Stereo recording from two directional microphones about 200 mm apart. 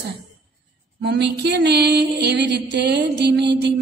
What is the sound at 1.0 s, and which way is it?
A woman's voice, 55° right (ahead or behind).